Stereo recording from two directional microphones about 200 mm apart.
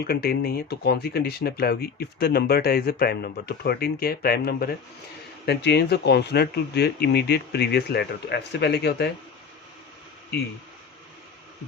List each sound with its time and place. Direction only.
0.0 s speech: 50° left (ahead or behind)